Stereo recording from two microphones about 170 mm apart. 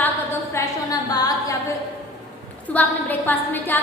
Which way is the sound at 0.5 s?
20° left (ahead or behind).